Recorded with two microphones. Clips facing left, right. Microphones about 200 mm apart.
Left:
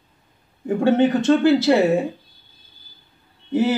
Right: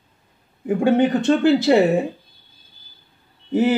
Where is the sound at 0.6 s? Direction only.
10° right (ahead or behind).